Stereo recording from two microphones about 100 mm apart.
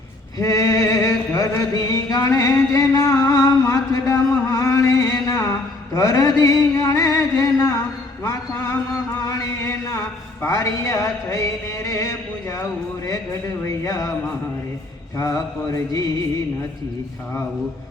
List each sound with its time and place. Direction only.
0.3 s a sound: 35° left (ahead or behind)
8.2 s a man's voice: 35° left (ahead or behind)
9.2 s chant: 35° left (ahead or behind)
10.4 s music: 30° left (ahead or behind)
13.8 s music: 35° left (ahead or behind)
15.2 s music: 35° left (ahead or behind)